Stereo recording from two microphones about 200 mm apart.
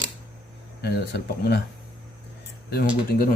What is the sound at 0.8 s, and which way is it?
Speech, 55° left (ahead or behind).